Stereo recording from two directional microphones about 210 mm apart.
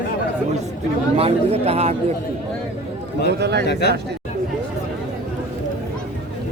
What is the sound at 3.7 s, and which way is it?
Speech, 50° left (ahead or behind).